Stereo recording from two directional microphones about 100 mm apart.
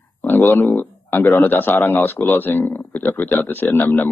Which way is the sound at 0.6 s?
15° left (ahead or behind).